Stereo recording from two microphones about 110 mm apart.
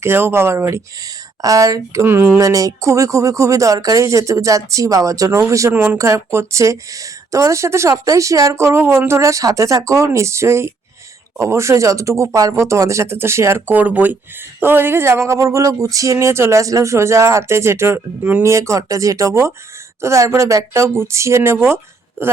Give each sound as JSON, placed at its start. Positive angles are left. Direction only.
{"t": 0.0, "sound": "speech", "side_deg": -20}
{"t": 2.4, "sound": "speech", "side_deg": -30}